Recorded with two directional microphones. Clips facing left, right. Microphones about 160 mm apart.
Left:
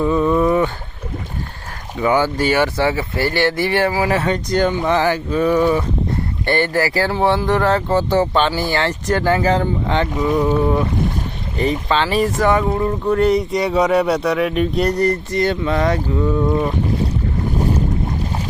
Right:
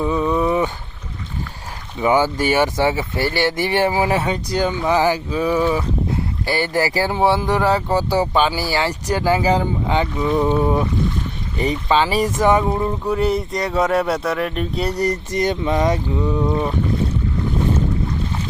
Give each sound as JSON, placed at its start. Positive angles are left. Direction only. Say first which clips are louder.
{"t": 0.1, "sound": "a sound", "louder": "left 3 dB", "side_deg": 0}
{"t": 2.0, "sound": "speech", "louder": "even", "side_deg": -15}
{"t": 10.3, "sound": "boat", "louder": "even", "side_deg": -20}
{"t": 11.5, "sound": "speech", "louder": "left 2 dB", "side_deg": 45}
{"t": 11.9, "sound": "speech", "louder": "right 2 dB", "side_deg": -10}
{"t": 13.1, "sound": "speech", "louder": "left 5 dB", "side_deg": -5}